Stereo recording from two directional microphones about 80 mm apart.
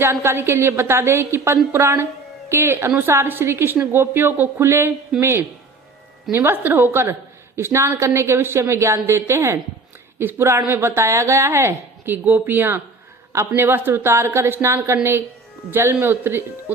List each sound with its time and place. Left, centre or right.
0.0 s a woman's voice: right
6.3 s a woman's voice: right